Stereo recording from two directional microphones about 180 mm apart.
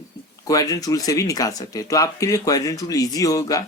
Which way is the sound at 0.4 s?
20° left (ahead or behind).